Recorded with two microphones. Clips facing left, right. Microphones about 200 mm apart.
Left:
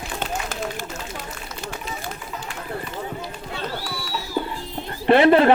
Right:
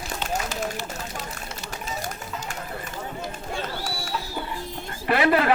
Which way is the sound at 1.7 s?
45° right (ahead or behind).